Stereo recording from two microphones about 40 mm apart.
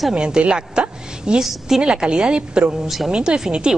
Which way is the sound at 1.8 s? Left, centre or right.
Right.